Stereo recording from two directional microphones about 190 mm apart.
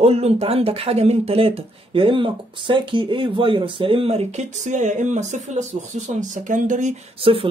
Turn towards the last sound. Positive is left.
turn(degrees=-30)  # may be behind; listen again after turning